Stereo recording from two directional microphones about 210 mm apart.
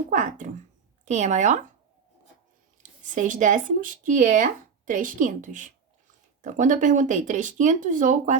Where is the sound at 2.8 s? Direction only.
40° right (ahead or behind).